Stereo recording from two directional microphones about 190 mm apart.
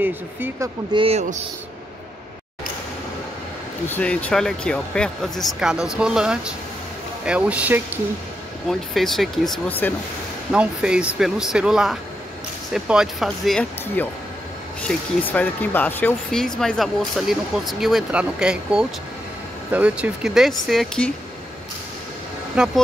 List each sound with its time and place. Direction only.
0.0 s speech: 10° right (ahead or behind)
0.9 s speech: 30° right (ahead or behind)
3.9 s speech: 5° left (ahead or behind)
10.5 s speech: 5° right (ahead or behind)
22.6 s speech: 5° right (ahead or behind)